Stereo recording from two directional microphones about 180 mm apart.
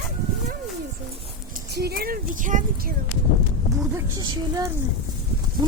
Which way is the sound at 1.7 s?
60° right (ahead or behind).